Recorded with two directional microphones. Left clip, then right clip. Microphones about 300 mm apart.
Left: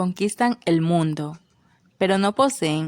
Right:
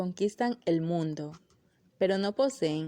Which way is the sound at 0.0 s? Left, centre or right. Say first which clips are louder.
Left 8 dB; centre.